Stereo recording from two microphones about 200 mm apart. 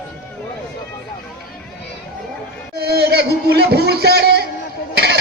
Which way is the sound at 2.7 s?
50° right (ahead or behind).